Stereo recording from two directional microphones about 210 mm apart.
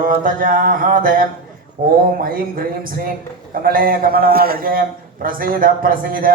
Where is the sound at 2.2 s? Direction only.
45° right (ahead or behind).